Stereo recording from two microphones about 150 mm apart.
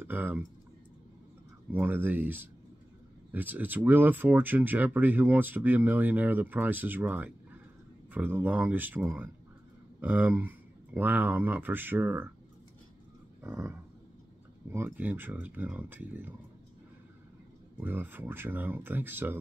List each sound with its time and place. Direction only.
0.0 s speech: 10° right (ahead or behind)
1.7 s speech: 15° right (ahead or behind)
13.4 s a sound: 15° right (ahead or behind)
14.9 s speech: 10° right (ahead or behind)
17.7 s speech: 10° right (ahead or behind)